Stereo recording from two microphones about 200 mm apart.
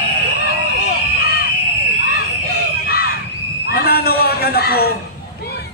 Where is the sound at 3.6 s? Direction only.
50° left (ahead or behind).